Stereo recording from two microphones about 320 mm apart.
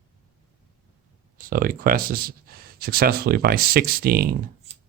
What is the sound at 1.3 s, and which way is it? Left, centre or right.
Speech, right.